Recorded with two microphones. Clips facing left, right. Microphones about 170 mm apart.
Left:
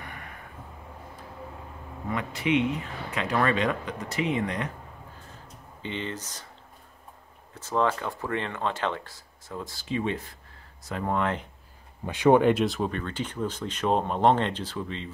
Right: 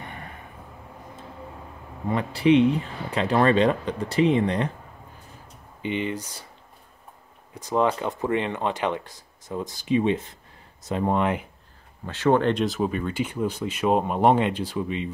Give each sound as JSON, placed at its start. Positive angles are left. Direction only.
{"t": 0.0, "sound": "vehicle", "side_deg": -25}
{"t": 2.0, "sound": "speech", "side_deg": -30}
{"t": 5.8, "sound": "speech", "side_deg": -15}
{"t": 7.5, "sound": "speech", "side_deg": -15}
{"t": 12.1, "sound": "speech", "side_deg": 15}